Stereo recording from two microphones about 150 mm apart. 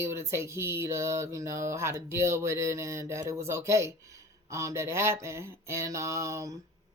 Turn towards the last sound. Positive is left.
turn(degrees=-20)  # may be behind; listen again after turning